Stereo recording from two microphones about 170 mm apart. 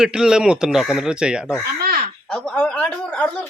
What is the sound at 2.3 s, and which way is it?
Speech, 5° left (ahead or behind).